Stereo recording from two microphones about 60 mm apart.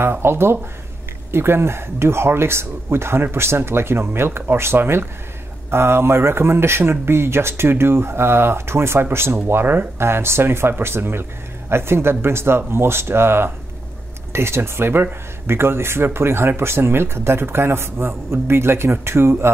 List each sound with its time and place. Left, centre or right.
0.0 s speech: right